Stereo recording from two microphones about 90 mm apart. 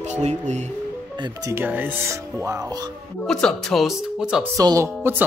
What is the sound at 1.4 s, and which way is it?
Speech, 30° right (ahead or behind).